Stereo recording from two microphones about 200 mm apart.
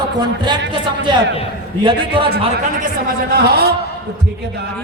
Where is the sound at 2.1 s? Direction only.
25° right (ahead or behind).